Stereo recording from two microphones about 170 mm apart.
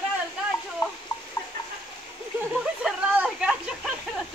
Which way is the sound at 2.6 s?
5° right (ahead or behind).